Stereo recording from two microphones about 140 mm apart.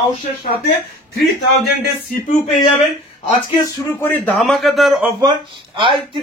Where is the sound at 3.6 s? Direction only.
20° left (ahead or behind).